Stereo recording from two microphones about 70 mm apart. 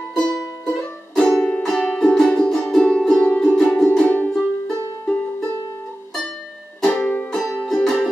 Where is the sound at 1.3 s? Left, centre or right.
Centre.